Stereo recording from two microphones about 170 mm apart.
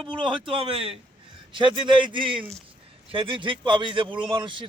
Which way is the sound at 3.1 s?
30° right (ahead or behind).